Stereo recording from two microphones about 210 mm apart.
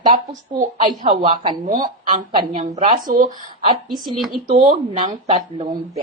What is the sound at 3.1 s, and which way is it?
Speech, 40° right (ahead or behind).